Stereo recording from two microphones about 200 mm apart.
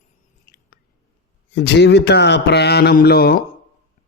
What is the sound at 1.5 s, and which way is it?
Speech, 60° left (ahead or behind).